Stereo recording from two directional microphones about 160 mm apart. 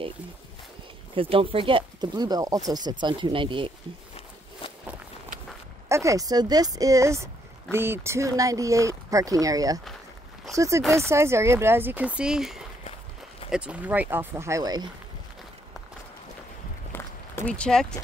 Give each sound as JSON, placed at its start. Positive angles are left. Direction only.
{"t": 1.1, "sound": "speech", "side_deg": -35}
{"t": 5.9, "sound": "speech", "side_deg": -20}
{"t": 16.9, "sound": "a sound", "side_deg": 10}